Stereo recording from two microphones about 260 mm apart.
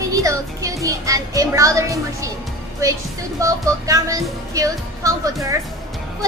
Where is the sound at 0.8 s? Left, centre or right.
Centre.